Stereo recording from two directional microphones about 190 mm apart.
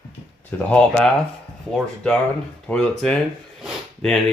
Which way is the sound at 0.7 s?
5° left (ahead or behind).